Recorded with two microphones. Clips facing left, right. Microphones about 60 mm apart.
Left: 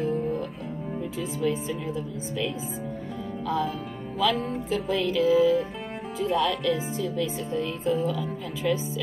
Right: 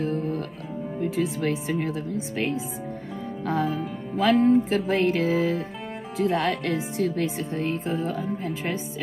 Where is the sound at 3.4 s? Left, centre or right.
Right.